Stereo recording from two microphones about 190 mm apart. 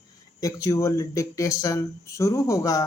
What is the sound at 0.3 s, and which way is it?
Speech, 15° left (ahead or behind).